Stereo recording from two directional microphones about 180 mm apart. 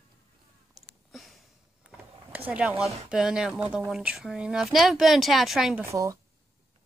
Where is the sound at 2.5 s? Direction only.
5° right (ahead or behind).